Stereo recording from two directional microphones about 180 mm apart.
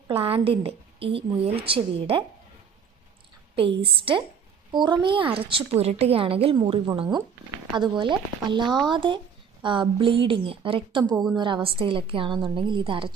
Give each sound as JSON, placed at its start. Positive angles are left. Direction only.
{"t": 0.1, "sound": "a woman's voice", "side_deg": -30}
{"t": 3.5, "sound": "a woman's voice", "side_deg": -30}